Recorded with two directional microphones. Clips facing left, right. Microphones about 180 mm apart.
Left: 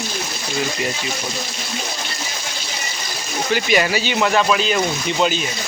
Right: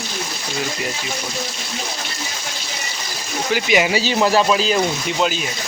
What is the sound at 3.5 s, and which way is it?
Speech, 10° right (ahead or behind).